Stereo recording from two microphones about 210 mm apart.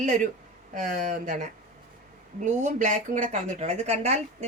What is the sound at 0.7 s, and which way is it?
Speech, 40° right (ahead or behind).